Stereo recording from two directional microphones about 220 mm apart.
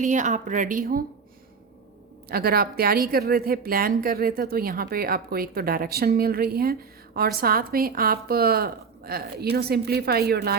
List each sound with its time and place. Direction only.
0.0 s speech: 35° right (ahead or behind)
2.3 s a woman's voice: 45° right (ahead or behind)